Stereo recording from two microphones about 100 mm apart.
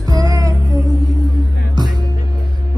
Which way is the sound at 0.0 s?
35° right (ahead or behind).